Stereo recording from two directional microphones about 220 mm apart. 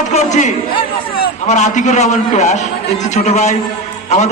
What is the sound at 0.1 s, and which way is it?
A man's voice, 30° left (ahead or behind).